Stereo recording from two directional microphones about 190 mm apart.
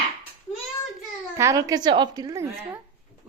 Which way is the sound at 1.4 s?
15° right (ahead or behind).